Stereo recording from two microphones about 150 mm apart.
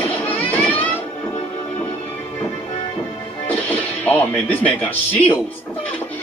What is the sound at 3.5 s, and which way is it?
Speech, 10° left (ahead or behind).